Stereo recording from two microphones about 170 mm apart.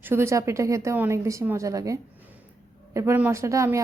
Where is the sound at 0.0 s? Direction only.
15° right (ahead or behind).